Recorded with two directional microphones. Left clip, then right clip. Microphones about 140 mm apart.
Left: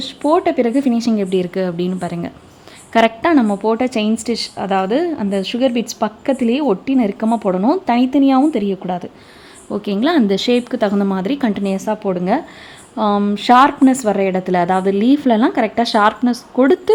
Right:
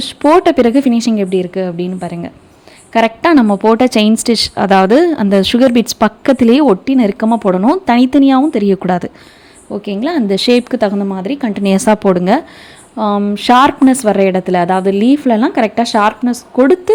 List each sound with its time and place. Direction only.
0.0 s a woman's voice: 35° right (ahead or behind); by 3.1 s 10° right (ahead or behind)
3.5 s a woman's voice: 35° right (ahead or behind)
6.8 s a woman's voice: 25° right (ahead or behind)
8.4 s a woman's voice: 20° right (ahead or behind)
8.6 s a woman's voice: 40° right (ahead or behind)
9.6 s a woman's voice: 5° right (ahead or behind)
10.2 s a woman's voice: 25° right (ahead or behind)
10.9 s speech: 5° right (ahead or behind)
11.6 s a woman's voice: 40° right (ahead or behind)
13.0 s a woman's voice: 15° right (ahead or behind)